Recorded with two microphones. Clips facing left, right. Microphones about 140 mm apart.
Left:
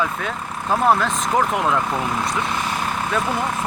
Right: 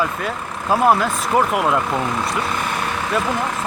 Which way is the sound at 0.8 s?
10° right (ahead or behind).